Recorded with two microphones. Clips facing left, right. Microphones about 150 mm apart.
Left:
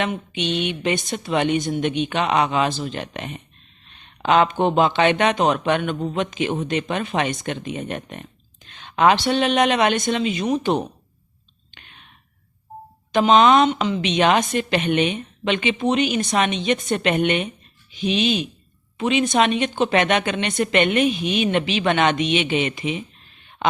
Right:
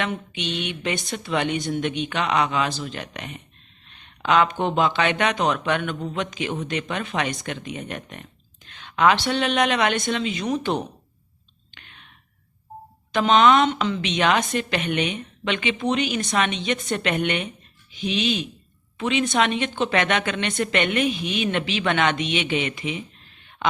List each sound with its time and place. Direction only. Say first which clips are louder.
0.1 s a woman's voice: left 4 dB; 20° left (ahead or behind)
13.1 s a woman's voice: left 2 dB; 20° left (ahead or behind)